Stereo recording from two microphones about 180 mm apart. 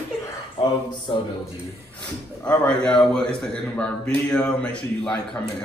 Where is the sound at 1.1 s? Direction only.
30° left (ahead or behind).